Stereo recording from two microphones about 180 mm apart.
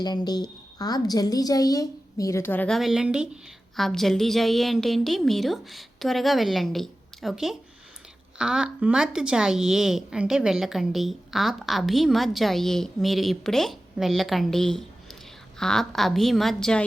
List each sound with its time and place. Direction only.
0.0 s a woman's voice: 25° left (ahead or behind); by 16.8 s 5° left (ahead or behind)